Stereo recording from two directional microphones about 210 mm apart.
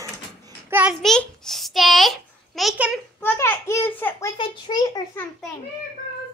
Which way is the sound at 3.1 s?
10° left (ahead or behind).